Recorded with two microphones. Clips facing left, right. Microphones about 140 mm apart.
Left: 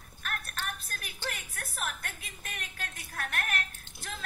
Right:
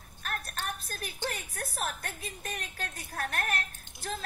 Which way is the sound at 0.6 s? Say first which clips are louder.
Right 2 dB; 40° right (ahead or behind).